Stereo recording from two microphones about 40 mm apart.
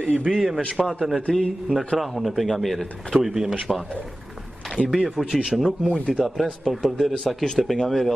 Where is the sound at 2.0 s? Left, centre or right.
Centre.